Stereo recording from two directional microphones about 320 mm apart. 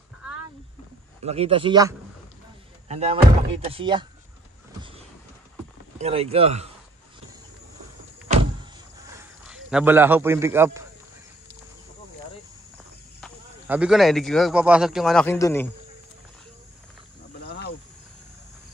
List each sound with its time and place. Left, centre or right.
1.2 s speech: centre
5.9 s speech: centre
9.1 s a man's voice: centre
13.2 s speech: centre
17.5 s a sound: left